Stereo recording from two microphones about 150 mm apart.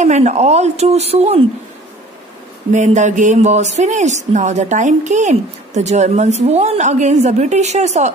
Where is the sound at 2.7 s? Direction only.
55° right (ahead or behind).